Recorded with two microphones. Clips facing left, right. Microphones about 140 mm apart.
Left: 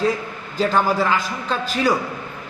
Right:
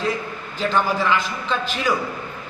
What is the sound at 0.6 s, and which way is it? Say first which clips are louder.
A man's voice: left 2 dB; 40° left (ahead or behind).